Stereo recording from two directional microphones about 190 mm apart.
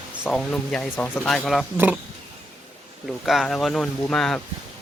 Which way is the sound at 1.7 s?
10° right (ahead or behind).